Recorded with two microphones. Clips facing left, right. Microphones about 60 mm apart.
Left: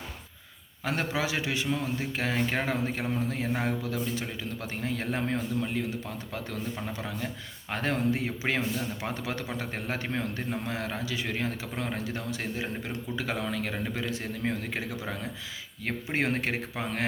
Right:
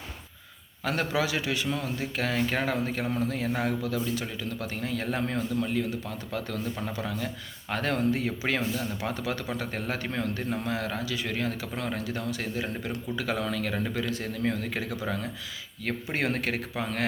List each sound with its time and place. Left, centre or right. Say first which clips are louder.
0.9 s speech: right 2 dB; left